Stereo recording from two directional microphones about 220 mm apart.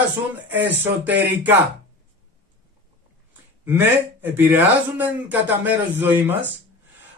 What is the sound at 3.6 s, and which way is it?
Speech, 10° right (ahead or behind).